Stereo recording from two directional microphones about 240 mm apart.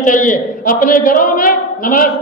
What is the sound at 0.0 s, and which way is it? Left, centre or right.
A woman's voice, left.